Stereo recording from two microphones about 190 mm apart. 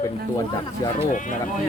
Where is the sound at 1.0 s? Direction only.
45° left (ahead or behind).